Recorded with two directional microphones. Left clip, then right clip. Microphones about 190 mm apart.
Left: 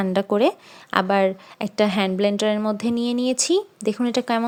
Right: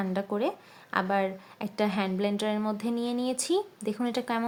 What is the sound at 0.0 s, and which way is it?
Speech, 40° left (ahead or behind).